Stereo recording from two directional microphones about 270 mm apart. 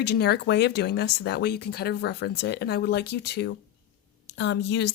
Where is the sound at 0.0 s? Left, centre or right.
Left.